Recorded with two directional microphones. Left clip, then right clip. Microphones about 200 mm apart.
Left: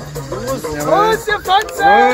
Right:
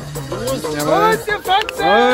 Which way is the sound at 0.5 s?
10° right (ahead or behind).